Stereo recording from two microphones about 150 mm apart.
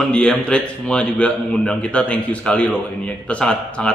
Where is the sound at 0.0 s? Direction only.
5° left (ahead or behind).